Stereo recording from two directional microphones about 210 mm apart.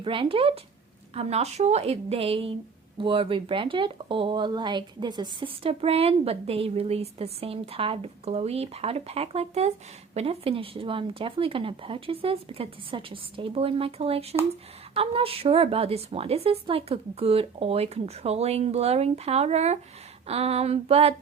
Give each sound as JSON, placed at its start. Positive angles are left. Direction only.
{"t": 0.0, "sound": "speech", "side_deg": -25}